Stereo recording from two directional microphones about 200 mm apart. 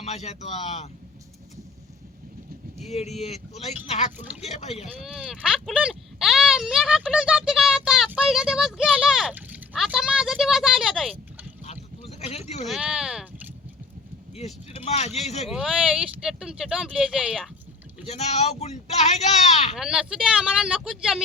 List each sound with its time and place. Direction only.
0.0 s speech: 35° left (ahead or behind)
2.7 s speech: 35° left (ahead or behind)
4.9 s speech: centre (ahead or behind)
11.6 s boat: 30° left (ahead or behind)
12.6 s speech: centre (ahead or behind)
14.3 s speech: 35° left (ahead or behind)
15.4 s speech: 5° right (ahead or behind)
18.0 s speech: 30° left (ahead or behind)
19.7 s speech: 5° right (ahead or behind)